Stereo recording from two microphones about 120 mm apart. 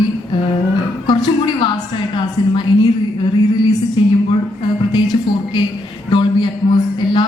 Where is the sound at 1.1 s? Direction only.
35° left (ahead or behind).